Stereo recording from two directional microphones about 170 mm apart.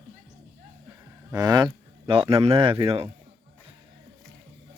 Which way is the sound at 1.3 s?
25° right (ahead or behind).